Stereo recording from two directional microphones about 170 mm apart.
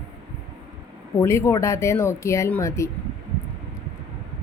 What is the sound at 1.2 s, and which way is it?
Speech, 15° left (ahead or behind).